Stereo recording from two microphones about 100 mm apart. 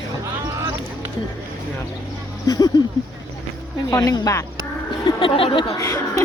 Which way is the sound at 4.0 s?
40° left (ahead or behind).